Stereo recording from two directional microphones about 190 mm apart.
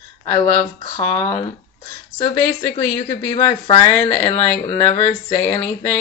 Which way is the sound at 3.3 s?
25° left (ahead or behind).